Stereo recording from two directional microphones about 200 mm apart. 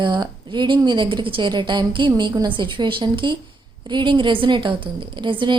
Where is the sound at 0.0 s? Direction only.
25° right (ahead or behind).